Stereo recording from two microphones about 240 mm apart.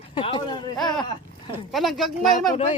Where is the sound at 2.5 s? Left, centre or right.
Left.